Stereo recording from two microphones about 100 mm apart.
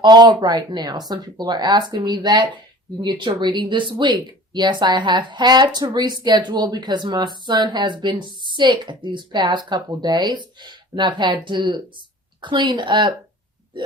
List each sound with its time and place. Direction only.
0.0 s speech: 45° right (ahead or behind)